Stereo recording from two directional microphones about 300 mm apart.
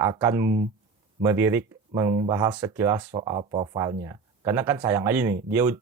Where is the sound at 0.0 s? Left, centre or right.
Centre.